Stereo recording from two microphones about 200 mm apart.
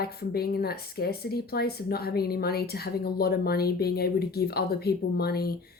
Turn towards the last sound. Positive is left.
turn(degrees=50)  # may be behind; listen again after turning